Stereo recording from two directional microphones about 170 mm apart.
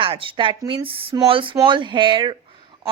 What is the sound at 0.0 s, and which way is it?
A woman's voice, 30° right (ahead or behind).